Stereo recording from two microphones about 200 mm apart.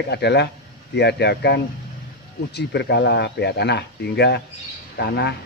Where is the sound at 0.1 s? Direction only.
55° left (ahead or behind).